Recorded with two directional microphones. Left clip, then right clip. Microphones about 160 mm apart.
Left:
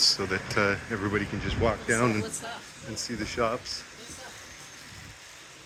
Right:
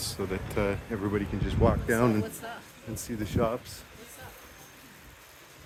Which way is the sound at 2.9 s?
35° right (ahead or behind).